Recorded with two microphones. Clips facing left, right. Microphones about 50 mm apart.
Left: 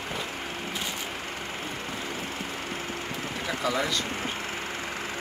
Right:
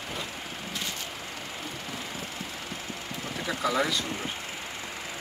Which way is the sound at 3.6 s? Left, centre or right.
Centre.